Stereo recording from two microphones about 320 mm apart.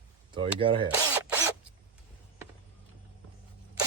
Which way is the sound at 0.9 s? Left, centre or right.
Centre.